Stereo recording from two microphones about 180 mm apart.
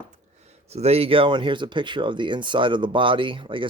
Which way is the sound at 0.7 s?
35° right (ahead or behind).